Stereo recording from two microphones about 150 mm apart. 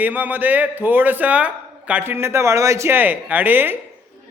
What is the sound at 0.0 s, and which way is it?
A man's voice, 10° right (ahead or behind).